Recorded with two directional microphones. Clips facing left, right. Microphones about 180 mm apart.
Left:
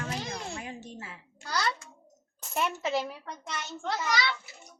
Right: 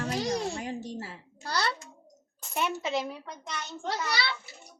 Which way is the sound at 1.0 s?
35° right (ahead or behind).